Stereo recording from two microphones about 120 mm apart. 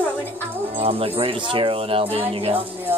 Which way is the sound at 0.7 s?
55° right (ahead or behind).